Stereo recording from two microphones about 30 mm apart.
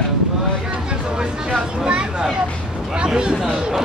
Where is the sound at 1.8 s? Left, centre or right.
Right.